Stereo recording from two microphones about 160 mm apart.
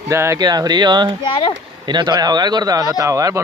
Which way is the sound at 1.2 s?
35° left (ahead or behind).